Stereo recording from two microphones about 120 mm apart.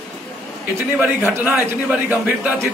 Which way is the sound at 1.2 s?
20° right (ahead or behind).